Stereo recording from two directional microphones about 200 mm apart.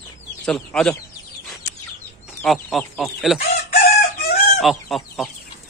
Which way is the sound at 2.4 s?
Centre (ahead or behind).